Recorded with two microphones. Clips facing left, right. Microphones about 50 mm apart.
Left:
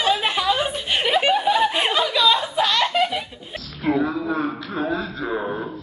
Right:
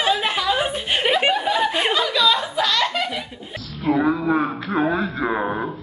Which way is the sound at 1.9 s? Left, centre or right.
Left.